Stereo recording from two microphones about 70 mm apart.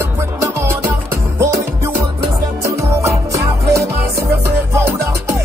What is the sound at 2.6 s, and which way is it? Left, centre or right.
Music, right.